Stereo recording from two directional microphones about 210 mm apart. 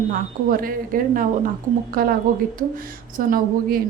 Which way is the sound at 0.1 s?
40° right (ahead or behind).